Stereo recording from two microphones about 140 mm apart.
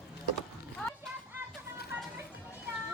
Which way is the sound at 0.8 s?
5° left (ahead or behind).